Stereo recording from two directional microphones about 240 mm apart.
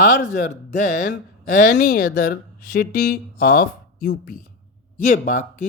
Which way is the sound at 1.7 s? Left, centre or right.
Left.